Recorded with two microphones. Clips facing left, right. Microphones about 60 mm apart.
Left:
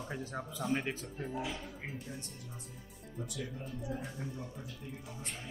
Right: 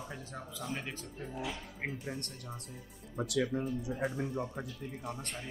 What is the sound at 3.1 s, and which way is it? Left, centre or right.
Speech, right.